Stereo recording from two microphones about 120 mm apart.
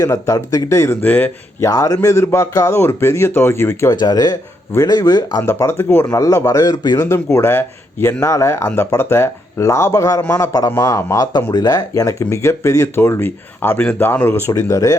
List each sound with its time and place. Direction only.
0.0 s speech: 30° left (ahead or behind)
1.0 s speech: 15° left (ahead or behind)
1.6 s speech: 30° left (ahead or behind)